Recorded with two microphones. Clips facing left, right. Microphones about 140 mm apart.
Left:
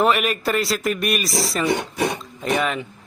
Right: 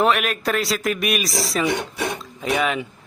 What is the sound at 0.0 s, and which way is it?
A man's voice, centre (ahead or behind).